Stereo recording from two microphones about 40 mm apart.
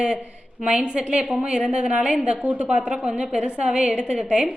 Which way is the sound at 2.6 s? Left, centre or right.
Right.